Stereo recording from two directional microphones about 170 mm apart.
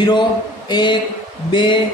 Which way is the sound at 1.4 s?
30° left (ahead or behind).